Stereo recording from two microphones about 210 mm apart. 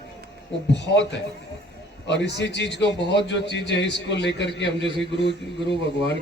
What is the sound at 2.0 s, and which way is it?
A man's voice, 55° left (ahead or behind).